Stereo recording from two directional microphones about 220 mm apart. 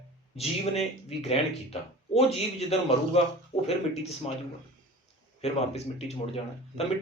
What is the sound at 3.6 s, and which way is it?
Speech, 30° left (ahead or behind).